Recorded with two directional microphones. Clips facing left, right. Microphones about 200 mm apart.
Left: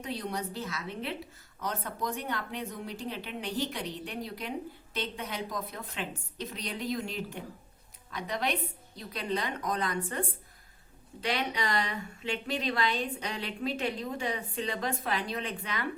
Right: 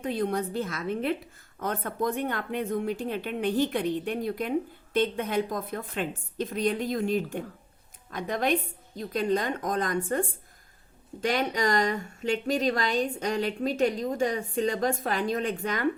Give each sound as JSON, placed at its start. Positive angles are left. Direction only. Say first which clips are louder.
{"t": 0.0, "sound": "speech", "louder": "right 7 dB", "side_deg": -50}